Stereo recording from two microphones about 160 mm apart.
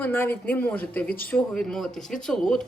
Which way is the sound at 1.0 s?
65° left (ahead or behind).